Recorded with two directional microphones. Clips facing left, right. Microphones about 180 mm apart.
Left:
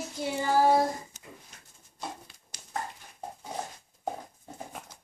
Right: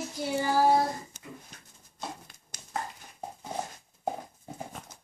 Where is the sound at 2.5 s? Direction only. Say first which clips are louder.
Right 2 dB; 45° right (ahead or behind).